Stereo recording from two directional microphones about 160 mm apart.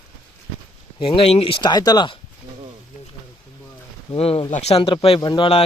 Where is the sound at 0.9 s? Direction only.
35° left (ahead or behind).